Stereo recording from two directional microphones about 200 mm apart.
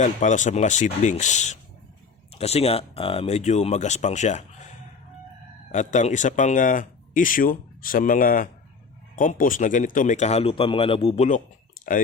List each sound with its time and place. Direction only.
0.0 s speech: 40° left (ahead or behind)
5.7 s speech: 35° left (ahead or behind)